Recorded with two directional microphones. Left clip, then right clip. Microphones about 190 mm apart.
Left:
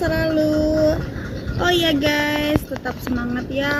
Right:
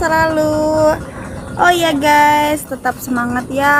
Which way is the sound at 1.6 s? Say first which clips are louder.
Right 6 dB; 15° right (ahead or behind).